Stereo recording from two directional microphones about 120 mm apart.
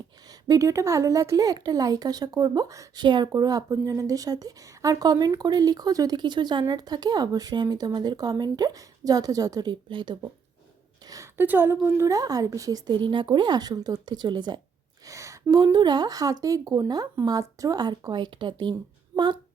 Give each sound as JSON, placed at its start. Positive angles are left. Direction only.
{"t": 0.3, "sound": "a woman's voice", "side_deg": -30}
{"t": 11.1, "sound": "a sound", "side_deg": -25}
{"t": 11.4, "sound": "a woman's voice", "side_deg": -15}
{"t": 15.0, "sound": "a woman's voice", "side_deg": -25}